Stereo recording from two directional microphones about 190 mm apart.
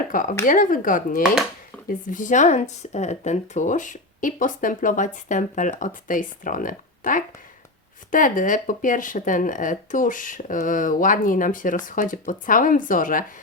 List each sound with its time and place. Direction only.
0.1 s speech: 45° left (ahead or behind)